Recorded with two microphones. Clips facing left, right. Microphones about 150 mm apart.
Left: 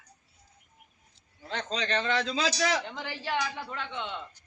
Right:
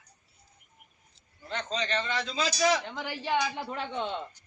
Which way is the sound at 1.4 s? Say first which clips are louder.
Even; 85° left.